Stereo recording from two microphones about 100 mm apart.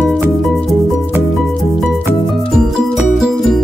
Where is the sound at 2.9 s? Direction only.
5° right (ahead or behind).